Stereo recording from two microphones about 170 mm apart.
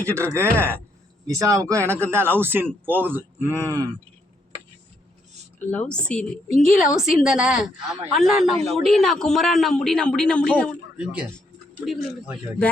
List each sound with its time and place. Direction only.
0.0 s speech: 15° right (ahead or behind)
5.7 s a woman's voice: 5° left (ahead or behind)
10.9 s a woman's voice: 5° right (ahead or behind)